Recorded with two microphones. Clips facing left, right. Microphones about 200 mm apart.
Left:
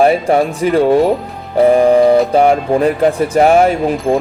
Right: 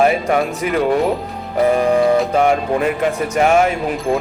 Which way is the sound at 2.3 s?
35° left (ahead or behind).